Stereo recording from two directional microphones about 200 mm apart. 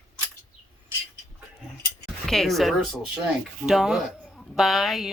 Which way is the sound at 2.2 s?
Centre (ahead or behind).